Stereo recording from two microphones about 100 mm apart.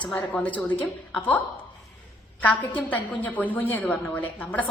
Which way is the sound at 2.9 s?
15° left (ahead or behind).